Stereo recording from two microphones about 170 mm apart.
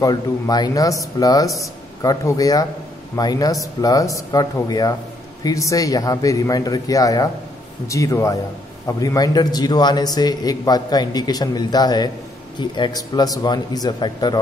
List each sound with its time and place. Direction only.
0.0 s a man's voice: 25° left (ahead or behind)